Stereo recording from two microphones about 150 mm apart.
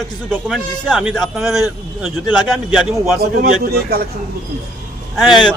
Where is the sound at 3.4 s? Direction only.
90° right.